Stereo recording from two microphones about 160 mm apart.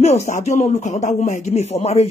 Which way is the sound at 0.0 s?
45° left (ahead or behind).